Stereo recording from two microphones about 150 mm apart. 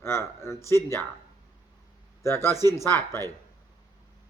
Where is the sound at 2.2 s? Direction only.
15° left (ahead or behind).